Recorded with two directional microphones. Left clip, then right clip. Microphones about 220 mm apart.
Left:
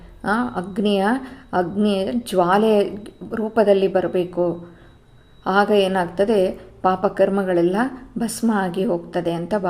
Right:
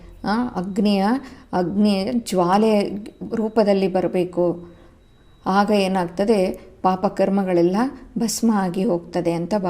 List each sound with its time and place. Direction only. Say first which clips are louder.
0.2 s a woman's voice: left 2 dB; 30° right (ahead or behind)